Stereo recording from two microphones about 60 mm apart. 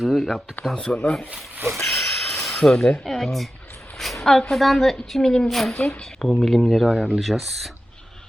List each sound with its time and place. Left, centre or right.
0.0 s speech: centre
0.6 s speech: left
1.7 s a woman's voice: centre
5.7 s speech: left
6.1 s a woman's voice: centre